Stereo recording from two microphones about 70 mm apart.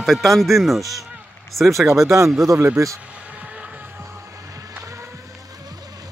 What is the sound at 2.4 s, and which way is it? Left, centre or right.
Speech, right.